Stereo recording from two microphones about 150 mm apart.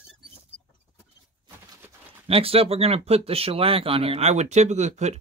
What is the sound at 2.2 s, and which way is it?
Speech, 40° right (ahead or behind).